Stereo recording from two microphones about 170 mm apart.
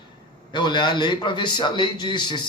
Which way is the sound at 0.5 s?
25° left (ahead or behind).